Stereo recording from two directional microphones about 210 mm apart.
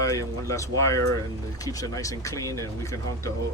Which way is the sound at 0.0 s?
15° left (ahead or behind).